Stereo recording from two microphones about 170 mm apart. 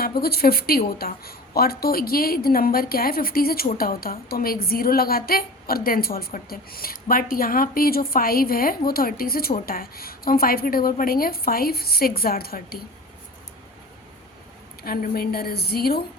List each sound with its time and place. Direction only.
0.2 s a woman's voice: 65° left (ahead or behind)
14.8 s a woman's voice: 65° left (ahead or behind)